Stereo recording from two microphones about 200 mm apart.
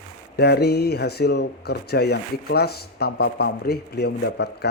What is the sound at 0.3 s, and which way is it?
Speech, 55° left (ahead or behind).